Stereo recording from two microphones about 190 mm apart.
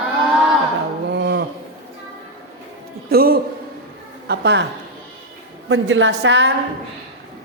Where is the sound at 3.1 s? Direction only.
50° right (ahead or behind).